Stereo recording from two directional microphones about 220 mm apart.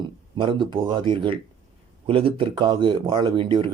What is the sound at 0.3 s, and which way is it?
Speech, 20° right (ahead or behind).